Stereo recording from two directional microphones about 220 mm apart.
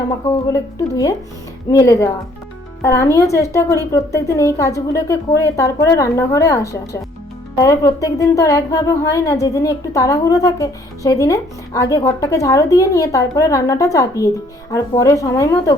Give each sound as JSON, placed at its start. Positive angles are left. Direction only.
{"t": 0.3, "sound": "speech", "side_deg": 15}